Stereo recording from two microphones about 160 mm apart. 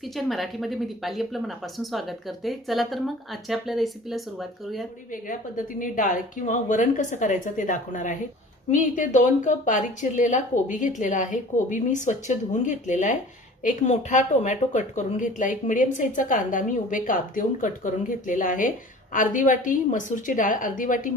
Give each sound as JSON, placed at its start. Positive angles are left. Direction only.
{"t": 0.0, "sound": "speech", "side_deg": 0}
{"t": 5.1, "sound": "a woman's voice", "side_deg": 55}